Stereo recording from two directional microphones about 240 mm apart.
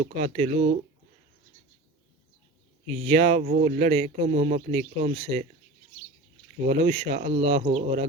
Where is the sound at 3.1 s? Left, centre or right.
Right.